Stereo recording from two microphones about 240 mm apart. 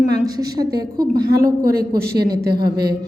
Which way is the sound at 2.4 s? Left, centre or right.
Right.